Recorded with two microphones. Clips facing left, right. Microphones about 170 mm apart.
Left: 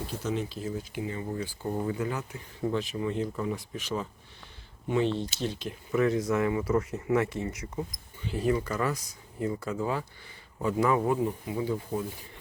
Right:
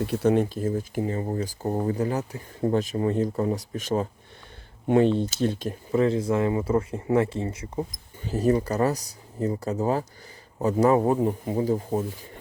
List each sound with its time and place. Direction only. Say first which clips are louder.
0.0 s speech: right 10 dB; 65° right (ahead or behind); by 4.1 s 45° right (ahead or behind)
5.1 s speech: right 7 dB; 50° right (ahead or behind)
5.9 s speech: right 3 dB; 30° right (ahead or behind)
8.2 s speech: right 5 dB; 40° right (ahead or behind)